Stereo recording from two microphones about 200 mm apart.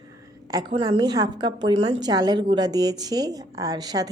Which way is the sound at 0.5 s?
20° right (ahead or behind).